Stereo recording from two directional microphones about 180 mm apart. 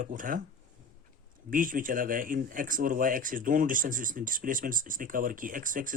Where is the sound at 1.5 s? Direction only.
50° right (ahead or behind).